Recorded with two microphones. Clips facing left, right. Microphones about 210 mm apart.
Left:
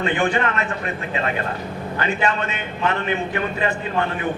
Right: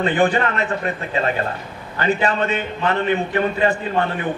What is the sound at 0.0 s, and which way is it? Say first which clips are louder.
Speech: right 3 dB; 35° right (ahead or behind).